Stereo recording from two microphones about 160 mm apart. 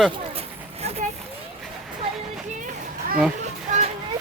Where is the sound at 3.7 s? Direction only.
50° right (ahead or behind).